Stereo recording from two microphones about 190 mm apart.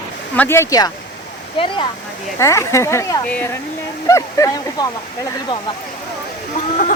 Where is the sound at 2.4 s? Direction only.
15° left (ahead or behind).